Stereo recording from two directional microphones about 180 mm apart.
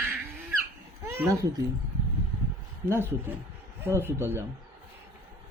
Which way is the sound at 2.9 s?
15° right (ahead or behind).